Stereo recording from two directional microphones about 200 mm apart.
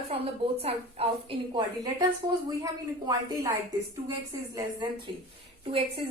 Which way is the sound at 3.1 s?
15° right (ahead or behind).